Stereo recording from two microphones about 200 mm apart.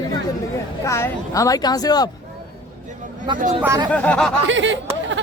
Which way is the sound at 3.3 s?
25° right (ahead or behind).